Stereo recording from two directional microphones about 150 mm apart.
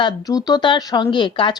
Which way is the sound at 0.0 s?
25° left (ahead or behind).